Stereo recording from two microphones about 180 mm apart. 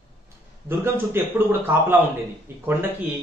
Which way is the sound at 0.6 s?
10° right (ahead or behind).